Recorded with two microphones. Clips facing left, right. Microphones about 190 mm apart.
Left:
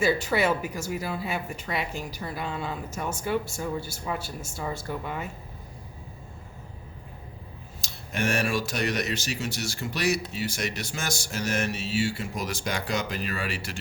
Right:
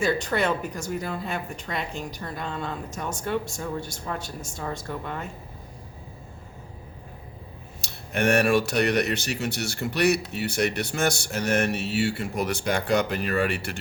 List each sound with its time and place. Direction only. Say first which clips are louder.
0.0 s speech: even; 5° left (ahead or behind)
7.8 s speech: right 4 dB; 60° right (ahead or behind)